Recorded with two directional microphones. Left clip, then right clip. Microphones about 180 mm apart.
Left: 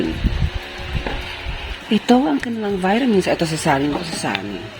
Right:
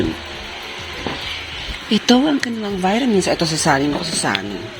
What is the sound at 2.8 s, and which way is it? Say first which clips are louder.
Speech: right 1 dB; 25° left (ahead or behind).